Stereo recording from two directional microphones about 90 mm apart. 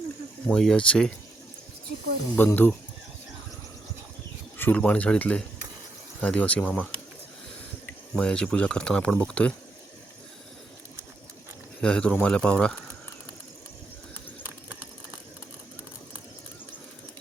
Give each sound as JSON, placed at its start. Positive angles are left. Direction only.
{"t": 0.4, "sound": "speech", "side_deg": 5}
{"t": 2.3, "sound": "speech", "side_deg": 20}
{"t": 4.5, "sound": "speech", "side_deg": 20}
{"t": 8.1, "sound": "speech", "side_deg": 10}
{"t": 11.8, "sound": "speech", "side_deg": 10}